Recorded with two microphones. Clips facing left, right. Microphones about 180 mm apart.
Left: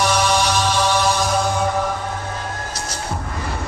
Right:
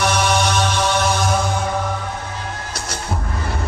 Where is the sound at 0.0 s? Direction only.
60° right (ahead or behind).